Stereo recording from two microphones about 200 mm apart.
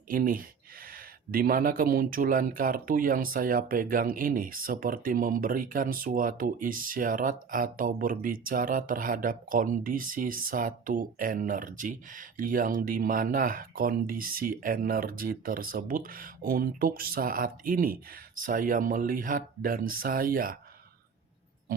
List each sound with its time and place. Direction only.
0.1 s speech: 45° right (ahead or behind)